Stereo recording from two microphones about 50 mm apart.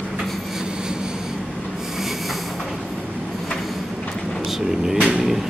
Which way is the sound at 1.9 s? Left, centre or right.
Centre.